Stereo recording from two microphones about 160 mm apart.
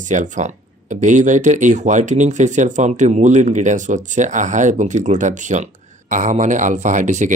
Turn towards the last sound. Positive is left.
turn(degrees=-50)  # may be behind; listen again after turning